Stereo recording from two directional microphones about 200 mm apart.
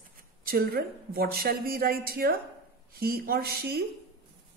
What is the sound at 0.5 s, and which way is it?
A woman's voice, 50° right (ahead or behind).